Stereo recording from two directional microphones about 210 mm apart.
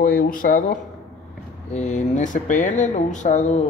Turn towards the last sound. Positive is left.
turn(degrees=35)  # may be behind; listen again after turning